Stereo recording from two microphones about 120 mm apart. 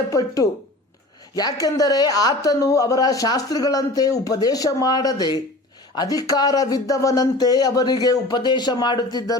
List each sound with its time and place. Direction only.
0.1 s speech: 30° left (ahead or behind)